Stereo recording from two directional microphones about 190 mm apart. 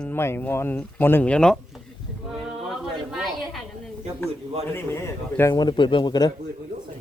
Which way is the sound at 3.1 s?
Centre (ahead or behind).